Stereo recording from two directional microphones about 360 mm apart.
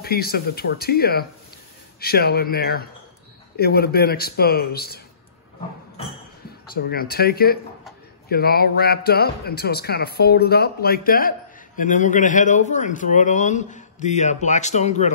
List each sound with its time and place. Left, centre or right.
0.0 s speech: left
6.7 s speech: left